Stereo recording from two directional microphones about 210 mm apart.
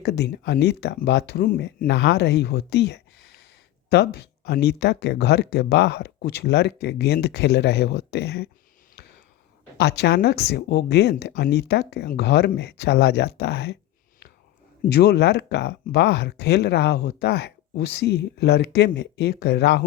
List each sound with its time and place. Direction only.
0.0 s speech: 50° left (ahead or behind)
9.7 s speech: 50° left (ahead or behind)
14.8 s speech: 50° left (ahead or behind)